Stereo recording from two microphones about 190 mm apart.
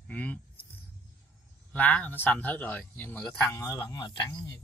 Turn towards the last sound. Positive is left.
turn(degrees=20)  # may be behind; listen again after turning